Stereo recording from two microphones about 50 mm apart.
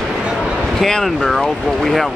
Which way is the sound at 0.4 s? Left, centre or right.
Centre.